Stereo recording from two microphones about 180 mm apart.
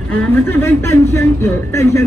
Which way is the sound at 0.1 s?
10° left (ahead or behind).